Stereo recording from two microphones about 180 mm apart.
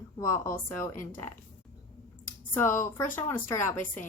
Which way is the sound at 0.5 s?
15° left (ahead or behind).